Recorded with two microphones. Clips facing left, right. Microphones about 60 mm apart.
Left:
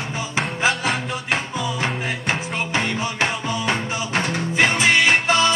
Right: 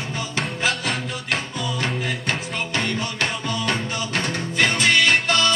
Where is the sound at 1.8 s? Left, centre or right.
Centre.